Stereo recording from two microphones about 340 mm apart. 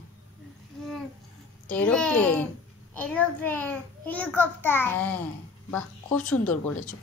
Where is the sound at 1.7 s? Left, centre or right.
Centre.